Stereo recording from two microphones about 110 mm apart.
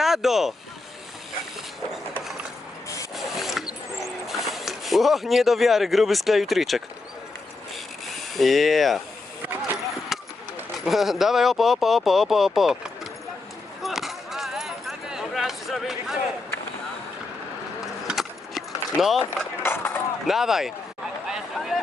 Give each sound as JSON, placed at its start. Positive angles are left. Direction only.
{"t": 0.0, "sound": "speech", "side_deg": -5}
{"t": 3.2, "sound": "a sound", "side_deg": 0}
{"t": 4.0, "sound": "speech", "side_deg": 0}
{"t": 8.1, "sound": "speech", "side_deg": 0}
{"t": 10.1, "sound": "vehicle", "side_deg": 0}
{"t": 10.8, "sound": "speech", "side_deg": 0}
{"t": 13.8, "sound": "a sound", "side_deg": 0}
{"t": 18.0, "sound": "vehicle", "side_deg": 0}
{"t": 19.3, "sound": "skateboard", "side_deg": 20}
{"t": 20.2, "sound": "speech", "side_deg": -5}
{"t": 21.2, "sound": "a sound", "side_deg": -5}